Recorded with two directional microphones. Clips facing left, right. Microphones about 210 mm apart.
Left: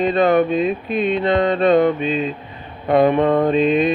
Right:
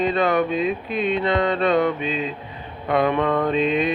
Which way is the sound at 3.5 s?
50° left (ahead or behind).